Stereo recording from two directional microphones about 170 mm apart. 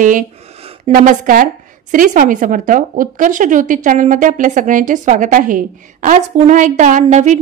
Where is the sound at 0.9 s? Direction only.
55° right (ahead or behind).